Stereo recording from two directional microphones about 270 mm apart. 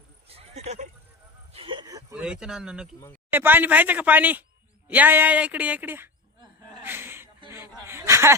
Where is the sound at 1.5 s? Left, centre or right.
Centre.